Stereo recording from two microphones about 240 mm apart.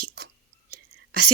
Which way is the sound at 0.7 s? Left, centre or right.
Right.